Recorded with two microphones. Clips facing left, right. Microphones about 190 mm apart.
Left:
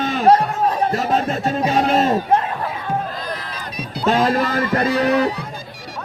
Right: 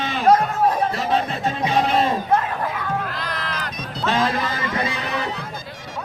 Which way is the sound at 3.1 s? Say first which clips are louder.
Even; 80° right.